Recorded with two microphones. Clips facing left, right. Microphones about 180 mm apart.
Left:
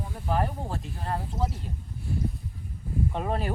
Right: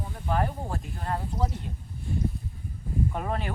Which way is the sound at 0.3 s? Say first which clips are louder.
Even; centre (ahead or behind).